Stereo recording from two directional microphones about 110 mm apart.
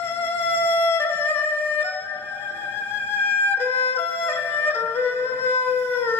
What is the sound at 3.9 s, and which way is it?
Music, 20° left (ahead or behind).